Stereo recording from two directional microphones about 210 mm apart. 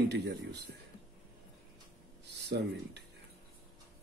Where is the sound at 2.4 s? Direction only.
55° right (ahead or behind).